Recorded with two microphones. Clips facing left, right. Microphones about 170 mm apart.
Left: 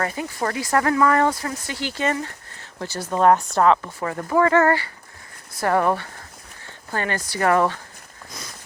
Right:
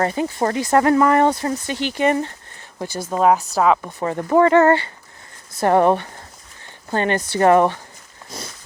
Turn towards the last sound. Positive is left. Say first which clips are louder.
# right 5 dB
turn(degrees=-20)  # may be behind; listen again after turning